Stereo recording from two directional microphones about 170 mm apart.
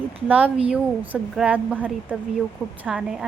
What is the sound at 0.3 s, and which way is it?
A woman's voice, 10° right (ahead or behind).